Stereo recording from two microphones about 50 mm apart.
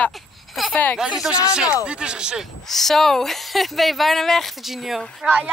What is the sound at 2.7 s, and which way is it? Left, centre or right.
Speech, centre.